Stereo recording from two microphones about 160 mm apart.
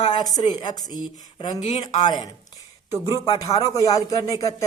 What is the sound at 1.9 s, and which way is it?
Speech, 25° left (ahead or behind).